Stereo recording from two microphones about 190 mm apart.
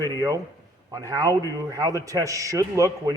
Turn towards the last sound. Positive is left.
turn(degrees=-15)  # may be behind; listen again after turning